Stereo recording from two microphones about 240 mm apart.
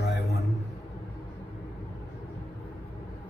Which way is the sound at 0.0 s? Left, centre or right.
Left.